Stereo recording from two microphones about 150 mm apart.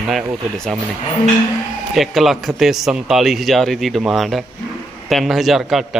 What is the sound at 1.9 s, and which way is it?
Speech, centre (ahead or behind).